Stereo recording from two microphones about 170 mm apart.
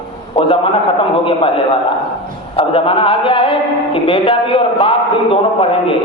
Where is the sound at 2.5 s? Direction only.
30° left (ahead or behind).